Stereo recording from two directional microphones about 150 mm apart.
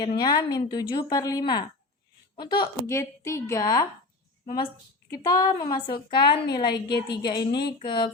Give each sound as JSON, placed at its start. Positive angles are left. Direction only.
{"t": 0.0, "sound": "a woman's voice", "side_deg": 30}
{"t": 2.9, "sound": "a woman's voice", "side_deg": 20}
{"t": 5.1, "sound": "a woman's voice", "side_deg": 25}